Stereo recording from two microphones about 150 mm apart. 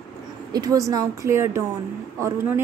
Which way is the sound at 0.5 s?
25° right (ahead or behind).